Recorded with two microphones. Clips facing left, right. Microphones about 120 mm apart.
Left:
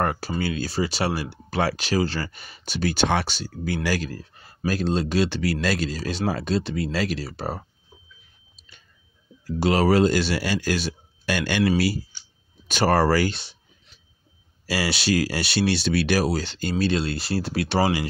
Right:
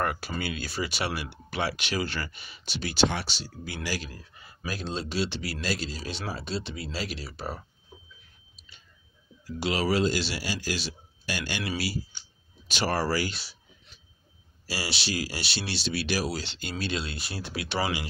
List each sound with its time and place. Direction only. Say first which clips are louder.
0.0 s speech: left 5 dB; 35° left (ahead or behind); by 4.2 s 55° left (ahead or behind)
4.3 s speech: left 10 dB; 45° left (ahead or behind)
9.6 s speech: left 7 dB; 45° left (ahead or behind)
13.3 s speech: left 6 dB; 25° left (ahead or behind)
14.7 s speech: left 9 dB; 60° left (ahead or behind); by 18.0 s 40° left (ahead or behind)